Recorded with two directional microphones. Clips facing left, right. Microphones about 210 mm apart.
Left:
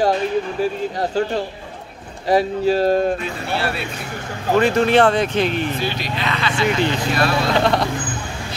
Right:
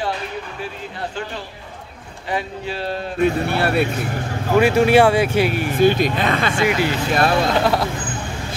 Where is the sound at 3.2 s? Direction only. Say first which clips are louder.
Right 6 dB; 55° right (ahead or behind).